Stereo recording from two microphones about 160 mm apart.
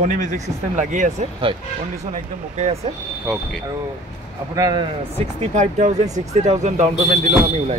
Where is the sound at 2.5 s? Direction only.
45° right (ahead or behind).